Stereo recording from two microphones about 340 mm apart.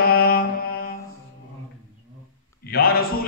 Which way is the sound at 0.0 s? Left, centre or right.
Left.